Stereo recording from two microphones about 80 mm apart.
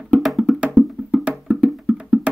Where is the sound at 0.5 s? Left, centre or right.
Centre.